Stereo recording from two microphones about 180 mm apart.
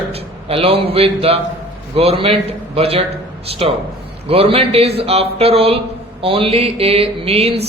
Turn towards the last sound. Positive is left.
turn(degrees=-35)  # may be behind; listen again after turning